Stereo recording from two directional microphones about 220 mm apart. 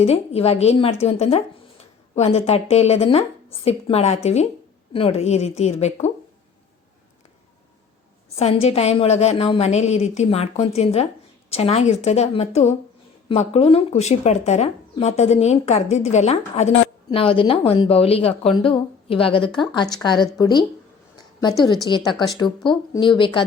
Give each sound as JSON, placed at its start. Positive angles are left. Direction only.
{"t": 0.0, "sound": "speech", "side_deg": 30}
{"t": 8.4, "sound": "speech", "side_deg": 30}
{"t": 21.8, "sound": "speech", "side_deg": 20}